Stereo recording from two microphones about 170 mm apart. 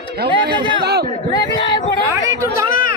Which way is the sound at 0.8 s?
70° right (ahead or behind).